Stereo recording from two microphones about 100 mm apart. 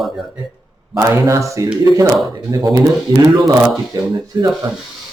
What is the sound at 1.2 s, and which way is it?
Speech, 30° right (ahead or behind).